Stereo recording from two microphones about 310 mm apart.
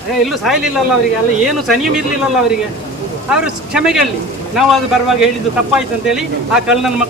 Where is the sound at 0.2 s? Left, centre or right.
Centre.